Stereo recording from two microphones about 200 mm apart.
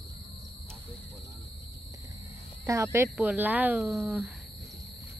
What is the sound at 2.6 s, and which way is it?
Speech, 15° right (ahead or behind).